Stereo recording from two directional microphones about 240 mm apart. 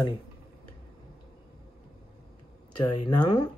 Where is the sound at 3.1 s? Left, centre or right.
Centre.